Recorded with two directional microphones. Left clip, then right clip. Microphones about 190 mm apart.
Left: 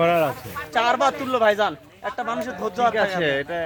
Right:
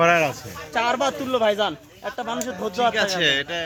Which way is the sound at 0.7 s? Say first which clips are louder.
Left 2 dB; 35° right (ahead or behind).